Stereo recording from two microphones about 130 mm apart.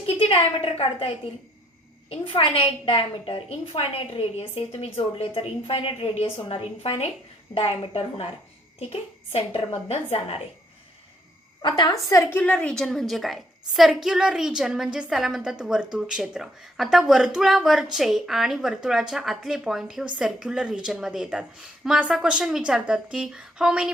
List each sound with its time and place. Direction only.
0.0 s a woman's voice: 45° left (ahead or behind)
12.0 s speech: 20° left (ahead or behind); by 23.9 s 5° right (ahead or behind)